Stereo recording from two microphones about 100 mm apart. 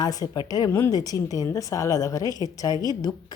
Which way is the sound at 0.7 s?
25° left (ahead or behind).